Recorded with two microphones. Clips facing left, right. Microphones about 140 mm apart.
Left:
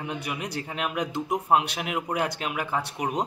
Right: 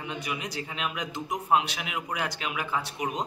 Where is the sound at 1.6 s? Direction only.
55° left (ahead or behind).